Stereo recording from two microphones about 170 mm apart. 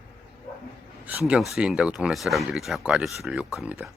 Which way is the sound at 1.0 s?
5° right (ahead or behind).